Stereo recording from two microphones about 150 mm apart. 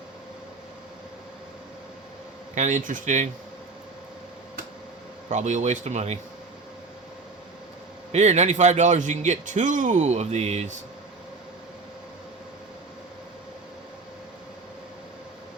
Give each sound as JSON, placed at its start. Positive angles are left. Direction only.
{"t": 2.6, "sound": "speech", "side_deg": -55}
{"t": 5.3, "sound": "a man's voice", "side_deg": -55}
{"t": 8.1, "sound": "a man's voice", "side_deg": -50}